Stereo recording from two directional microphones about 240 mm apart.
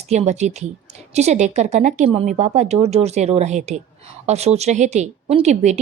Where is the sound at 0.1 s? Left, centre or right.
Right.